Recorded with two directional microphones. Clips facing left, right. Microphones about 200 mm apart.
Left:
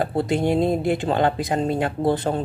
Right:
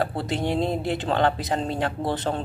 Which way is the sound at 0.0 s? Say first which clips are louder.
Left 5 dB; 15° left (ahead or behind).